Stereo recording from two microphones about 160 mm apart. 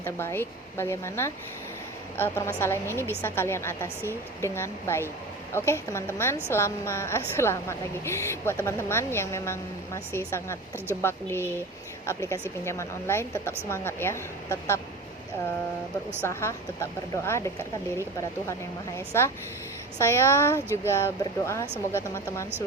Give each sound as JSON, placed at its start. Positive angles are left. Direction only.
{"t": 0.0, "sound": "a woman's voice", "side_deg": 15}
{"t": 16.2, "sound": "a woman's voice", "side_deg": 15}
{"t": 18.9, "sound": "a woman's voice", "side_deg": 15}